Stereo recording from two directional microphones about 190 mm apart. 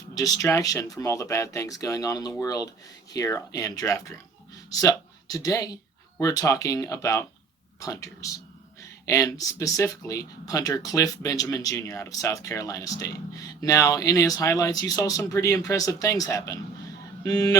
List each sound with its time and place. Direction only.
0.2 s speech: 15° left (ahead or behind)